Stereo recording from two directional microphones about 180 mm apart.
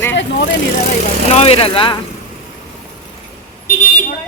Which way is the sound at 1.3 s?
35° left (ahead or behind).